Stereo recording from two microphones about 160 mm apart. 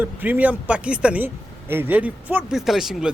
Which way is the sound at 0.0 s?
10° right (ahead or behind).